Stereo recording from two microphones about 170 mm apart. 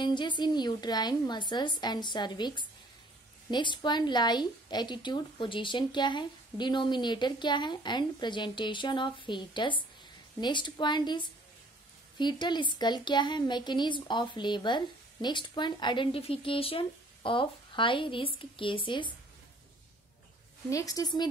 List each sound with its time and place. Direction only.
0.0 s speech: 25° left (ahead or behind)
20.7 s speech: 20° left (ahead or behind)